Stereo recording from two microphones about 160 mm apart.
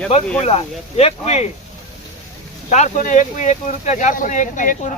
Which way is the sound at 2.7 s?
45° left (ahead or behind).